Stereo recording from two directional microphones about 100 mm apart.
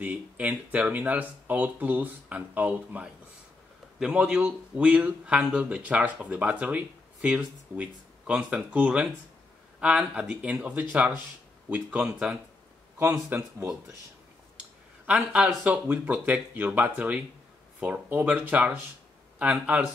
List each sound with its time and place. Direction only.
0.0 s a man's voice: 15° right (ahead or behind)
13.0 s a man's voice: 25° right (ahead or behind)
15.0 s a man's voice: 10° right (ahead or behind)